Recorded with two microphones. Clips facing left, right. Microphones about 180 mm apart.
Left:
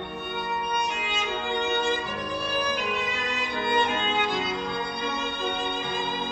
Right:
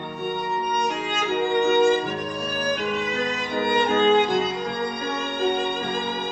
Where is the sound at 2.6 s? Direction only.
45° right (ahead or behind).